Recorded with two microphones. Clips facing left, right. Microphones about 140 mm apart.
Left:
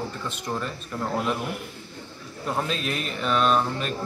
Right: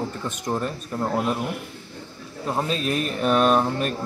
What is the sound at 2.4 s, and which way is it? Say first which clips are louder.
Speech: right 2 dB; 25° right (ahead or behind).